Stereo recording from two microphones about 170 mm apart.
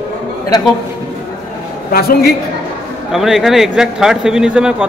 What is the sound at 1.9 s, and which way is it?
Speech, 60° left (ahead or behind).